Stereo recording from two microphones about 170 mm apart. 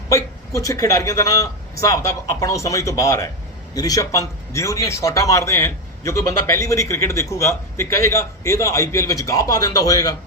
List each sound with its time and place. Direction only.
0.1 s a man's voice: 20° left (ahead or behind)